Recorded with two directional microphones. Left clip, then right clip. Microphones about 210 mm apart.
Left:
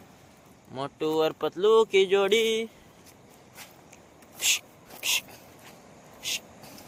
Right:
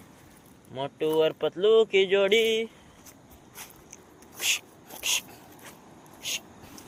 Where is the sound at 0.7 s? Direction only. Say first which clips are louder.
Right 1 dB; 15° left (ahead or behind).